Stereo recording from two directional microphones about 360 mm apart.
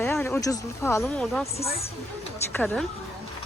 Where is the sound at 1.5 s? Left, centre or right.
Centre.